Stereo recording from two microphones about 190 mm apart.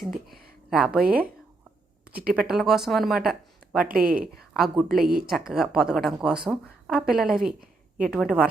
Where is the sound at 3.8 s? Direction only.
50° right (ahead or behind).